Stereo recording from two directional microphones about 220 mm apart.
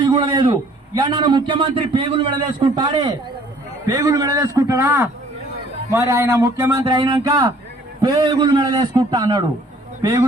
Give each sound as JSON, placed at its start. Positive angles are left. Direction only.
{"t": 0.0, "sound": "a man's voice", "side_deg": -20}